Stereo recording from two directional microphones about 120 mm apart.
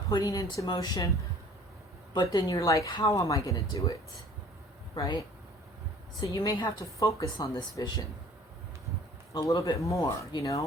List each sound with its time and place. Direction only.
0.1 s speech: 25° left (ahead or behind)
2.3 s speech: 30° left (ahead or behind)
4.9 s speech: 30° left (ahead or behind)
9.3 s speech: 25° left (ahead or behind)